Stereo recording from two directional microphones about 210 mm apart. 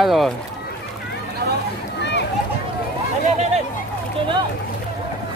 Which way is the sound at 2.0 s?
55° left (ahead or behind).